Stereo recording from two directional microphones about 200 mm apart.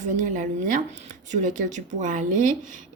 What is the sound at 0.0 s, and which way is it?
Speech, 40° right (ahead or behind).